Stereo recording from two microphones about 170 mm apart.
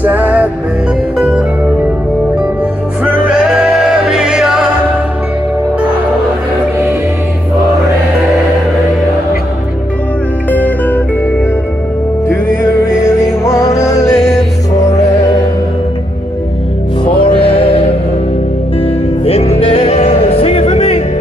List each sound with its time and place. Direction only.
0.0 s music: 10° right (ahead or behind)
3.3 s music: 5° right (ahead or behind)
10.5 s music: 10° left (ahead or behind)
13.0 s music: 15° left (ahead or behind)
17.0 s music: 30° left (ahead or behind)